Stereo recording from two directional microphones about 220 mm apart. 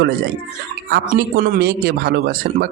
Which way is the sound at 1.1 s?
45° right (ahead or behind).